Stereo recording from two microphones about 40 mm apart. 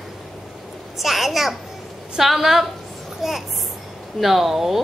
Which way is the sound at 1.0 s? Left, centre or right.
Centre.